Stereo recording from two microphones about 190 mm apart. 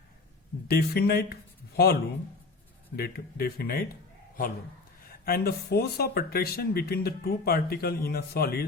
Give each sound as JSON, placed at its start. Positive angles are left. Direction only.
{"t": 0.7, "sound": "speech", "side_deg": 55}
{"t": 5.0, "sound": "speech", "side_deg": 50}